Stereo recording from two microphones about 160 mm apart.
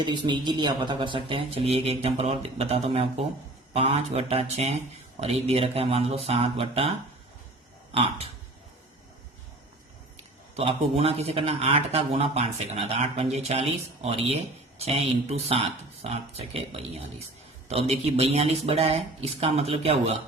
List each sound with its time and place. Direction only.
0.0 s a man's voice: 30° right (ahead or behind)
10.5 s a man's voice: 40° right (ahead or behind)